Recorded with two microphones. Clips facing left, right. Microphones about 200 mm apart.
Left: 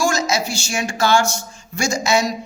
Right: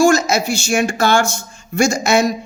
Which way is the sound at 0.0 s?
55° right (ahead or behind).